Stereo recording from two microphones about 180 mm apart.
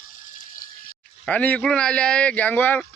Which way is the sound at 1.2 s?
10° left (ahead or behind).